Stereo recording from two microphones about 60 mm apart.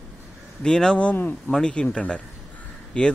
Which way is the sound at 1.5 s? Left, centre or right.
Centre.